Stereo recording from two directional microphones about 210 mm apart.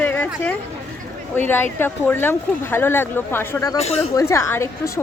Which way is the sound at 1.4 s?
10° left (ahead or behind).